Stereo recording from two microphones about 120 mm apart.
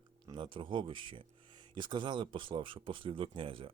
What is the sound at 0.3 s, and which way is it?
Speech, 40° right (ahead or behind).